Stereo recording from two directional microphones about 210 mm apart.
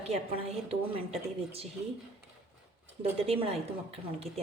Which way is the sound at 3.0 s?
25° right (ahead or behind).